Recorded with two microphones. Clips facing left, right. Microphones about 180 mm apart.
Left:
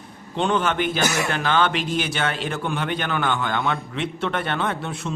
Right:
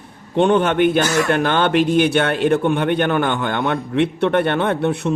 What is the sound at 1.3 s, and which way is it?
A man's voice, 55° right (ahead or behind).